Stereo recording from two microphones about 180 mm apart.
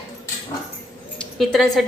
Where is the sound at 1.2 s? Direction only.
Centre (ahead or behind).